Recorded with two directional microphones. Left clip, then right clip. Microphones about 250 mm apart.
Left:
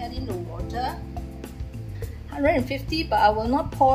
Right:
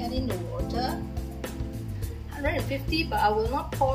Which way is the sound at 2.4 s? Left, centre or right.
Left.